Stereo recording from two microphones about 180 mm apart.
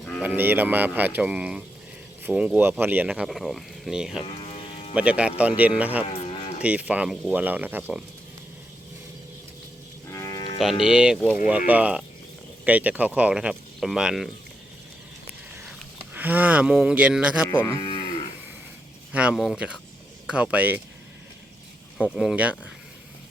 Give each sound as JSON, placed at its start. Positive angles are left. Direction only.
{"t": 0.2, "sound": "speech", "side_deg": -10}
{"t": 4.5, "sound": "music", "side_deg": 35}
{"t": 4.9, "sound": "speech", "side_deg": -5}
{"t": 6.1, "sound": "a sound", "side_deg": 35}
{"t": 6.6, "sound": "speech", "side_deg": -5}
{"t": 10.1, "sound": "livestock", "side_deg": 20}
{"t": 10.8, "sound": "speech", "side_deg": -5}
{"t": 16.1, "sound": "speech", "side_deg": -10}
{"t": 17.5, "sound": "speech", "side_deg": 20}
{"t": 19.1, "sound": "speech", "side_deg": -5}
{"t": 22.1, "sound": "speech", "side_deg": -5}